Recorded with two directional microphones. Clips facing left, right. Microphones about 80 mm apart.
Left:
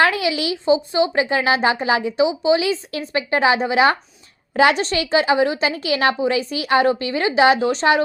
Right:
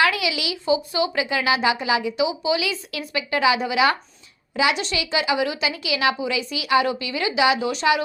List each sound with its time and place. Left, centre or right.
0.0 s speech: left
4.5 s speech: left